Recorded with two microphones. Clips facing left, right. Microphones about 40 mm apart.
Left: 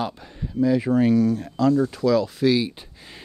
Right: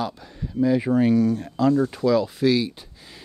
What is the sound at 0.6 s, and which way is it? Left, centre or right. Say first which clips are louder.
Speech: even; centre.